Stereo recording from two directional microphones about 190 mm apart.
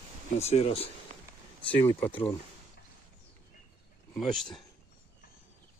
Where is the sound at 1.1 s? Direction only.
40° right (ahead or behind).